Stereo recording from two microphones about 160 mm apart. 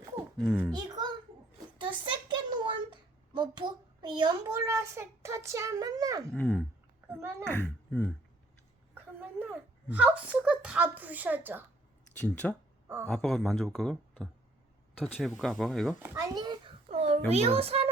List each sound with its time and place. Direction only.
0.8 s a sound: 25° right (ahead or behind)
3.3 s a child's voice: 30° right (ahead or behind)
6.3 s a child's voice: 10° left (ahead or behind)
7.1 s a sound: 15° right (ahead or behind)
7.4 s a child's voice: 10° left (ahead or behind)
9.2 s a woman's voice: 10° right (ahead or behind)
12.2 s a child's voice: 10° left (ahead or behind)
16.0 s a child's voice: 20° right (ahead or behind)
16.9 s a child's voice: 40° right (ahead or behind)